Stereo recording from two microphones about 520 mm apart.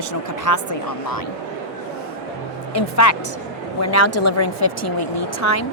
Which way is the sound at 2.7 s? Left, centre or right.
Left.